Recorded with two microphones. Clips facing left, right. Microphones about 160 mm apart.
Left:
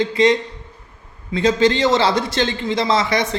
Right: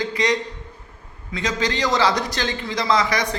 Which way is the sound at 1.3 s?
30° left (ahead or behind).